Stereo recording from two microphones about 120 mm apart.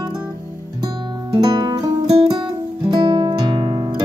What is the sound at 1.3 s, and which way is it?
Music, 35° right (ahead or behind).